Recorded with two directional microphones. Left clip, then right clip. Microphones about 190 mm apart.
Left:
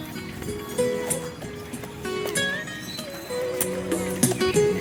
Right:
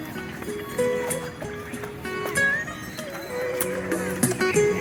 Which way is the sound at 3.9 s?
20° left (ahead or behind).